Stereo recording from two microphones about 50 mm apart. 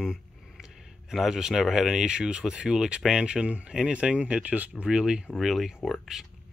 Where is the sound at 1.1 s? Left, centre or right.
Centre; by 4.9 s right.